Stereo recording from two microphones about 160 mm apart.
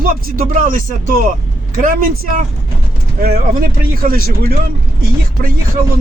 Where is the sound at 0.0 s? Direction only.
60° right (ahead or behind).